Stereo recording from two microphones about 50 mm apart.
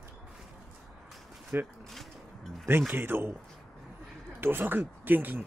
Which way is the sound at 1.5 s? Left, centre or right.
Right.